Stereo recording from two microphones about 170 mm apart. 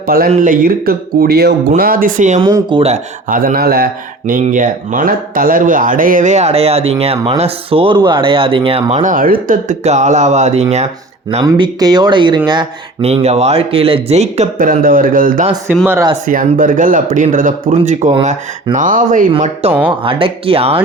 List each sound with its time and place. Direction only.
0.1 s speech: 55° right (ahead or behind)
1.8 s speech: 55° right (ahead or behind)
2.4 s speech: 30° right (ahead or behind); by 3.8 s 60° right (ahead or behind)
4.3 s speech: 50° right (ahead or behind)
11.4 s speech: 25° right (ahead or behind)
13.1 s speech: 40° right (ahead or behind); by 15.4 s 55° right (ahead or behind)
15.7 s speech: 10° right (ahead or behind)
16.2 s speech: 50° right (ahead or behind)
19.9 s speech: 30° right (ahead or behind)